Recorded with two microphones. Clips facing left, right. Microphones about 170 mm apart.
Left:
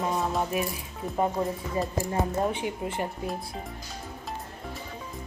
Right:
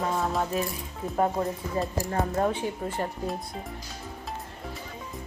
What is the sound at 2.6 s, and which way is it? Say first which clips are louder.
Speech: even; 10° left (ahead or behind).